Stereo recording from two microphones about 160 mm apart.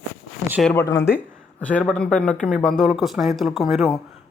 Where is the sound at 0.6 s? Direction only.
10° left (ahead or behind).